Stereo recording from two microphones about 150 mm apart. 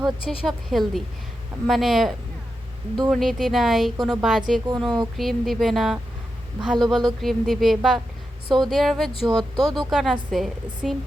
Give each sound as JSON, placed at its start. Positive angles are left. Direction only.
{"t": 0.0, "sound": "a woman's voice", "side_deg": 0}